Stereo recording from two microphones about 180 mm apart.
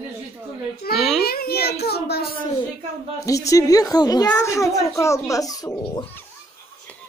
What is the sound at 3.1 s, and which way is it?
A woman's voice, 20° left (ahead or behind).